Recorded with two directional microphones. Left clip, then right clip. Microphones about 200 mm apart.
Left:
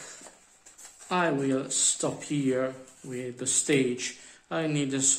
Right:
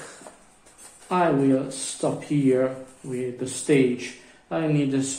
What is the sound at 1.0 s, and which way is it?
Speech, 35° left (ahead or behind).